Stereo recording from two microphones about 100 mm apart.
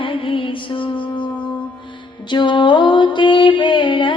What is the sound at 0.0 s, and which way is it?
Music, 60° left (ahead or behind).